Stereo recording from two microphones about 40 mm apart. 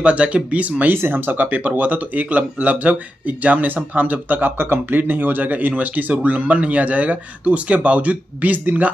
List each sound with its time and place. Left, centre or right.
0.0 s speech: right
0.9 s speech: right